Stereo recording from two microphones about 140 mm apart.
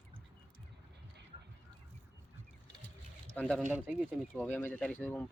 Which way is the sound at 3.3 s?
5° left (ahead or behind).